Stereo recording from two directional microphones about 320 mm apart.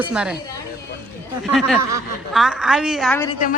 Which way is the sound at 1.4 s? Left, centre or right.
Centre.